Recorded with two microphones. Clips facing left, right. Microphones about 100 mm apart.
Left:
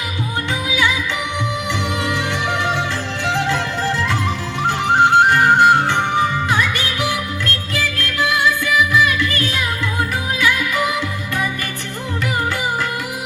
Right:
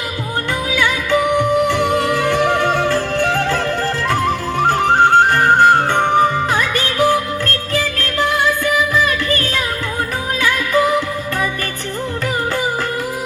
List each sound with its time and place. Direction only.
0.7 s music: 50° right (ahead or behind)